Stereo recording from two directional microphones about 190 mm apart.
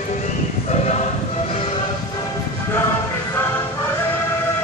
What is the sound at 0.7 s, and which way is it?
Choir, 35° left (ahead or behind).